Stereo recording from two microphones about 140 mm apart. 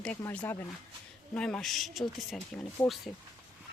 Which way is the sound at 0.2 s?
15° left (ahead or behind).